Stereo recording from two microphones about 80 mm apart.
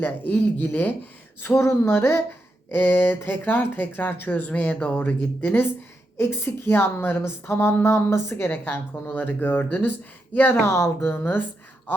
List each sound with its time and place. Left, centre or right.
0.0 s a woman's voice: left
10.7 s a woman's voice: left
11.0 s speech: left